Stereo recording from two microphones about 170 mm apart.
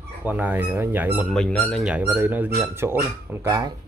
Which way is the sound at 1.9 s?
10° right (ahead or behind).